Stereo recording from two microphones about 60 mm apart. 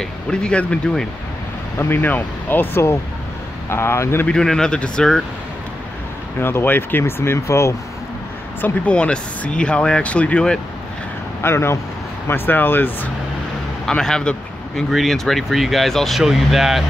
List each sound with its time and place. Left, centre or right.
0.0 s speech: centre
1.8 s speech: left
3.7 s speech: left
4.3 s speech: centre
6.4 s speech: left
8.8 s speech: centre
11.4 s speech: left
13.8 s speech: centre
14.9 s speech: centre